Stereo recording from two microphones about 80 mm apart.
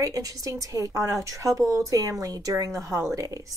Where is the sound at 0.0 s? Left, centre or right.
Right.